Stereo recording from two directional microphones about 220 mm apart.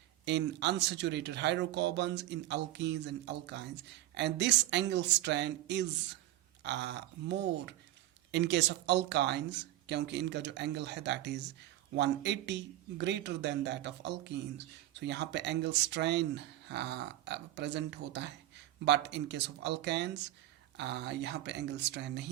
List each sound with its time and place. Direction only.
0.3 s speech: 50° right (ahead or behind)